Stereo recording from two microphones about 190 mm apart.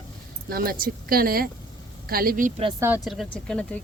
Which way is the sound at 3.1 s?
Centre (ahead or behind).